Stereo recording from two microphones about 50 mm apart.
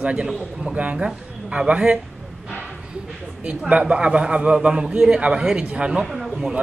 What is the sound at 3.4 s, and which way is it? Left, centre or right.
Speech, right.